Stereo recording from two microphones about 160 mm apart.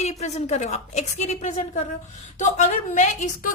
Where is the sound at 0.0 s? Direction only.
45° left (ahead or behind).